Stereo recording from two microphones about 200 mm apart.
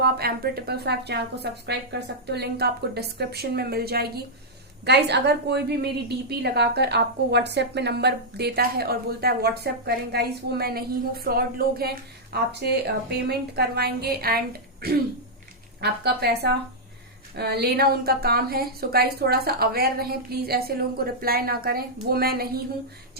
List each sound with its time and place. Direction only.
0.0 s a woman's voice: 50° right (ahead or behind)